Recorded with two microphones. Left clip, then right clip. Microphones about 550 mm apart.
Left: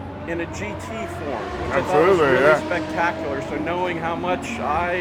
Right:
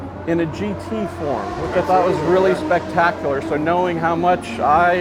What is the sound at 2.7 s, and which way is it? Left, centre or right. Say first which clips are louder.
Speech: right 5 dB; right.